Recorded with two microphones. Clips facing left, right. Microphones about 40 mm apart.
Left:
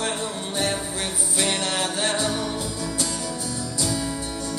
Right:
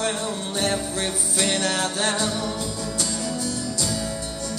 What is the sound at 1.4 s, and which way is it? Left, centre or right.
Music, left.